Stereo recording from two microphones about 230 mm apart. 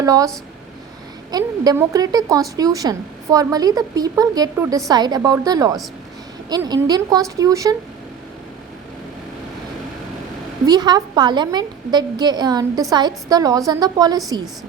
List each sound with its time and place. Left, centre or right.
0.0 s speech: centre
1.3 s a woman's voice: centre
10.7 s a woman's voice: centre